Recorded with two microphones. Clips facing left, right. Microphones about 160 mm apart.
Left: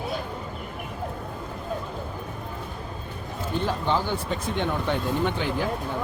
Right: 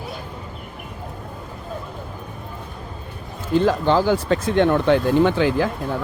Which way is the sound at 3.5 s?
90° right.